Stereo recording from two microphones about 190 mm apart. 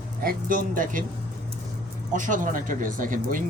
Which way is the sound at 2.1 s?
40° right (ahead or behind).